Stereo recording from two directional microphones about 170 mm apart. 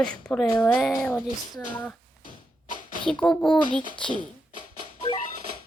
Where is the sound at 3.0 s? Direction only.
5° left (ahead or behind).